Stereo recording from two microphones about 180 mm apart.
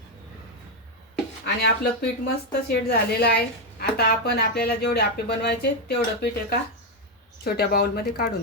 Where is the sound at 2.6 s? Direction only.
60° left (ahead or behind).